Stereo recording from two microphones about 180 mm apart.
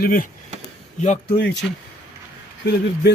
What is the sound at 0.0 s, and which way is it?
Speech, 55° left (ahead or behind).